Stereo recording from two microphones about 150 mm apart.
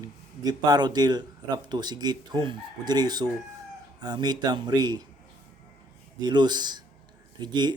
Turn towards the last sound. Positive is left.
turn(degrees=-30)  # may be behind; listen again after turning